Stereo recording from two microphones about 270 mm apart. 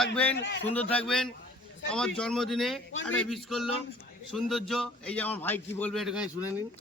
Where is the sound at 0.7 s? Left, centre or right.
Centre.